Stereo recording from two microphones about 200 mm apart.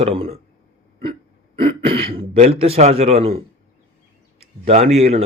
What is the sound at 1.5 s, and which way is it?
Speech, 30° right (ahead or behind).